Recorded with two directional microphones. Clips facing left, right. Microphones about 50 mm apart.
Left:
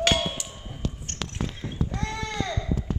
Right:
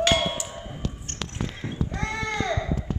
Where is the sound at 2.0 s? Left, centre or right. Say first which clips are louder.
Right 6 dB; right.